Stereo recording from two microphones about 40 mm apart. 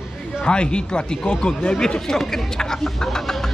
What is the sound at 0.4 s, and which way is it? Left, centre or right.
Speech, left.